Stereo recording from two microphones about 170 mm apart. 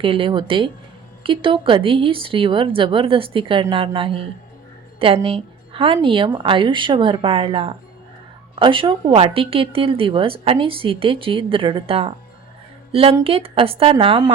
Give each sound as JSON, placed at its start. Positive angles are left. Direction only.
{"t": 0.0, "sound": "a woman's voice", "side_deg": -30}